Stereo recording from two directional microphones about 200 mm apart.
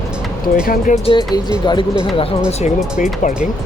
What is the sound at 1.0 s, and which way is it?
Speech, 25° left (ahead or behind).